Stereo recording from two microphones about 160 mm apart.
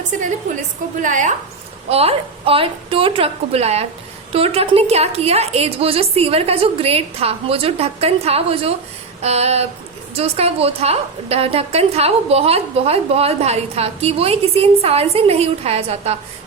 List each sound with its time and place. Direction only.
1.0 s a woman's voice: 50° right (ahead or behind)
1.9 s a woman's voice: 40° right (ahead or behind)